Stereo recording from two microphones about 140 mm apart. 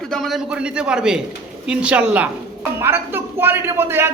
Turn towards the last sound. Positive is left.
turn(degrees=-15)  # may be behind; listen again after turning